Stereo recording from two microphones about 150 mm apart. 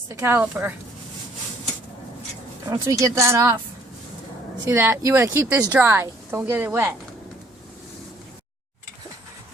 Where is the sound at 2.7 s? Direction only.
20° right (ahead or behind).